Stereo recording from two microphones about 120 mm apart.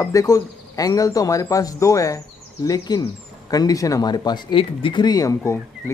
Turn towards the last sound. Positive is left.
turn(degrees=25)  # may be behind; listen again after turning